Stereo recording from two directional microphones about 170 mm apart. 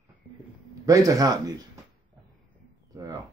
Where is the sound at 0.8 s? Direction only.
20° right (ahead or behind).